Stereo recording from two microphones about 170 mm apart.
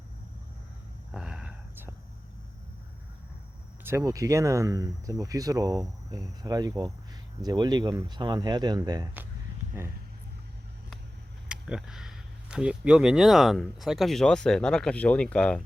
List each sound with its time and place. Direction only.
1.1 s a sound: 5° right (ahead or behind)
3.8 s speech: 15° right (ahead or behind)
11.4 s speech: 5° right (ahead or behind)